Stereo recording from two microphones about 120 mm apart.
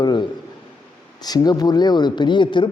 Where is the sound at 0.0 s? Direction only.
35° left (ahead or behind).